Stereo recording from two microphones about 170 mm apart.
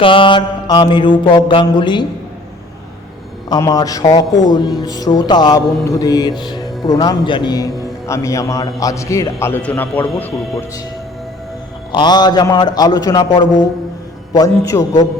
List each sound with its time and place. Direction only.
0.0 s speech: 30° left (ahead or behind)
3.5 s a man's voice: 20° left (ahead or behind)
11.9 s speech: 25° left (ahead or behind)